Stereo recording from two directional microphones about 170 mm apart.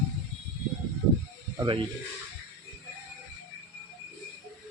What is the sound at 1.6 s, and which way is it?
Speech, 30° right (ahead or behind).